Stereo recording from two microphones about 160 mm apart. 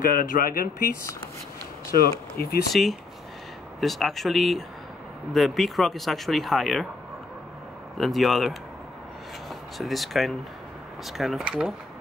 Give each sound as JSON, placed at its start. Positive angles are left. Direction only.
{"t": 0.0, "sound": "speech", "side_deg": 60}
{"t": 1.9, "sound": "speech", "side_deg": 70}
{"t": 2.7, "sound": "speech", "side_deg": 0}
{"t": 8.0, "sound": "speech", "side_deg": 0}